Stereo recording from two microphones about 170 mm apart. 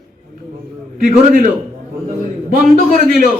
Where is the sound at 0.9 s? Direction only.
50° right (ahead or behind).